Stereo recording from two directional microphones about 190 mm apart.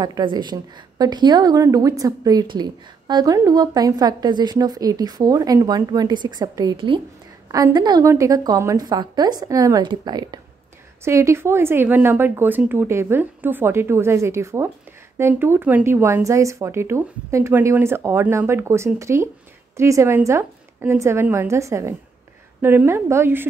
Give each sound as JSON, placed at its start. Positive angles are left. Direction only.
{"t": 0.0, "sound": "a woman's voice", "side_deg": -25}